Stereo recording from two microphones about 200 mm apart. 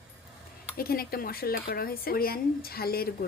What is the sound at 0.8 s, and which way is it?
Speech, 50° left (ahead or behind).